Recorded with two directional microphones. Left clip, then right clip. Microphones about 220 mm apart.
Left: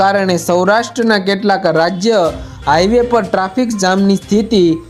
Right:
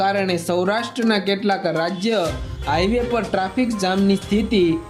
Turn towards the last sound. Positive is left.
turn(degrees=25)  # may be behind; listen again after turning